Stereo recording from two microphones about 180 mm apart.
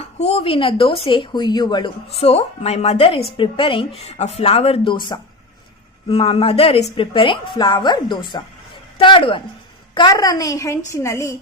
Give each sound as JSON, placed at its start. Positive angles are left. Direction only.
{"t": 0.0, "sound": "speech", "side_deg": 35}